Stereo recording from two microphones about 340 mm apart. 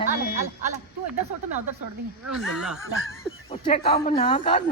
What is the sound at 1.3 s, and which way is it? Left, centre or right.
Speech, right.